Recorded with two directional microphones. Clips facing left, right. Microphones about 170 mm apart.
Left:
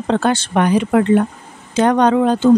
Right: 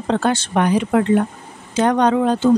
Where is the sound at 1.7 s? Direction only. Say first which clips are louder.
Left 2 dB; 70° left (ahead or behind).